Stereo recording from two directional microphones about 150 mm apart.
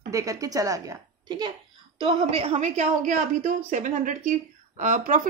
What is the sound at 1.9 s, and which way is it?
A woman's voice, 40° right (ahead or behind).